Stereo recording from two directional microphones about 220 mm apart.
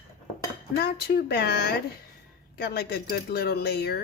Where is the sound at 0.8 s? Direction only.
45° left (ahead or behind).